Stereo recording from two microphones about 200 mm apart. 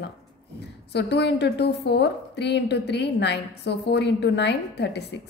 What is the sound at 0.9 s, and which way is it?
A woman's voice, 55° left (ahead or behind).